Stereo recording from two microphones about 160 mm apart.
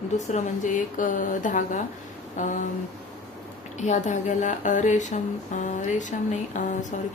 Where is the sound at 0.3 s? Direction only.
50° left (ahead or behind).